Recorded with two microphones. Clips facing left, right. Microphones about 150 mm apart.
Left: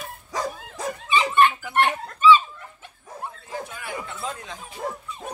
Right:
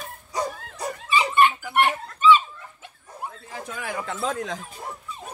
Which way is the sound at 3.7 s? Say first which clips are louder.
Right 3 dB; 90° right.